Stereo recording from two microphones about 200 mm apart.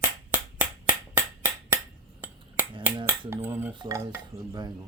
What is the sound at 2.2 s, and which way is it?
Finger snapping, 10° right (ahead or behind).